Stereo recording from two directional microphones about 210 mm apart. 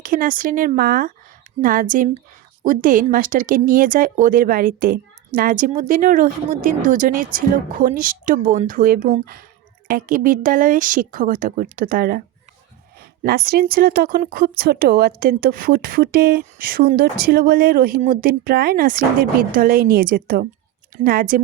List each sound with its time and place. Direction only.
0.0 s a woman's voice: 40° right (ahead or behind)